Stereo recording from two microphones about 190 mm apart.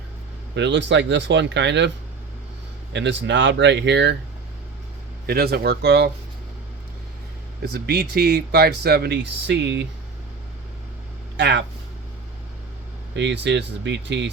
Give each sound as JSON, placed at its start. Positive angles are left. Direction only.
{"t": 0.5, "sound": "speech", "side_deg": -70}
{"t": 2.9, "sound": "speech", "side_deg": -65}
{"t": 5.2, "sound": "speech", "side_deg": -55}
{"t": 7.6, "sound": "speech", "side_deg": -55}
{"t": 11.3, "sound": "speech", "side_deg": -65}
{"t": 13.1, "sound": "speech", "side_deg": -70}